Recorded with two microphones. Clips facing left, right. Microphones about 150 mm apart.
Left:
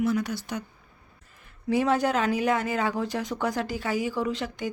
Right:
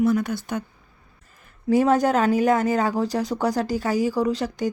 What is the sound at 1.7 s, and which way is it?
Speech, 45° right (ahead or behind).